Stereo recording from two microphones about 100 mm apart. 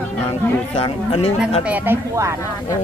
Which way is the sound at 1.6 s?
15° right (ahead or behind).